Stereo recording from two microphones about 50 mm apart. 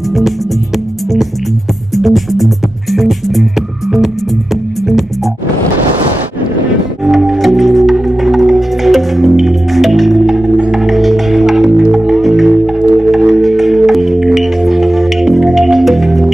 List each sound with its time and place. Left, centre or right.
2.0 s music: centre
7.1 s music: centre